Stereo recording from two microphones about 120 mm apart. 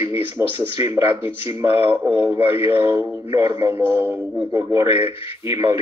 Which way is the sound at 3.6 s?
20° right (ahead or behind).